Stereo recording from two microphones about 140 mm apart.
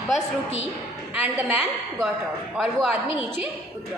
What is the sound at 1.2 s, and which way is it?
A woman's voice, 10° right (ahead or behind).